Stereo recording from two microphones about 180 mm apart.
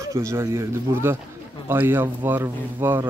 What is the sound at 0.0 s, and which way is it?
Speech, 15° right (ahead or behind).